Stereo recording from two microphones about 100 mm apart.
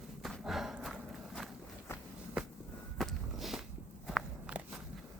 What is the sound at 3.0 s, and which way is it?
Walk, centre (ahead or behind).